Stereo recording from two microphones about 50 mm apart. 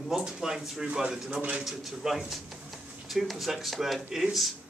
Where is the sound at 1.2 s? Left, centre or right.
Right.